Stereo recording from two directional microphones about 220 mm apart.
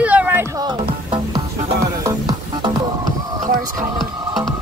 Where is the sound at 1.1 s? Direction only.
20° right (ahead or behind).